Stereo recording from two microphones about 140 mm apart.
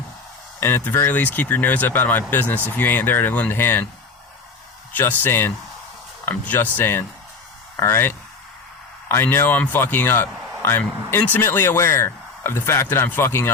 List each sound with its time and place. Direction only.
0.6 s a man's voice: 15° left (ahead or behind)
4.9 s a man's voice: 15° left (ahead or behind)